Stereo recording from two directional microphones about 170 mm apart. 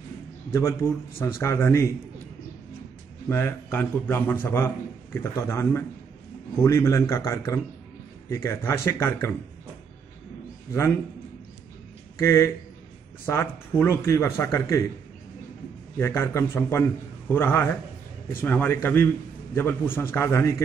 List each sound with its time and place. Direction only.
0.5 s speech: 15° left (ahead or behind)
3.3 s speech: 15° left (ahead or behind)
12.2 s speech: 15° left (ahead or behind)
16.0 s speech: 15° left (ahead or behind)